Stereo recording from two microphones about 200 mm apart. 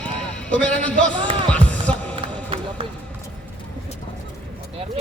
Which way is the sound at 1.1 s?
25° right (ahead or behind).